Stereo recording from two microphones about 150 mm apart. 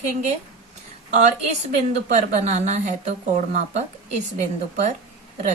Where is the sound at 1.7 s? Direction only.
55° right (ahead or behind).